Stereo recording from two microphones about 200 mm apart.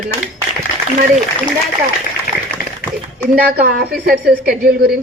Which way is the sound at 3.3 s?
50° right (ahead or behind).